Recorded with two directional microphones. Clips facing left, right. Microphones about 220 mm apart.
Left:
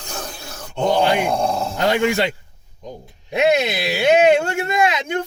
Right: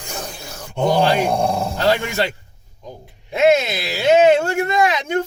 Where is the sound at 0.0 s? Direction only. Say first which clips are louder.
Right 1 dB; 15° right (ahead or behind).